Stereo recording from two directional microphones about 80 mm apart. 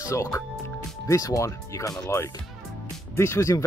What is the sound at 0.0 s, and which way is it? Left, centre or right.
Speech, left.